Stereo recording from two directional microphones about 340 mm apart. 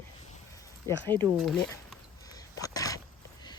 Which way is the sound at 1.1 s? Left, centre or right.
Centre.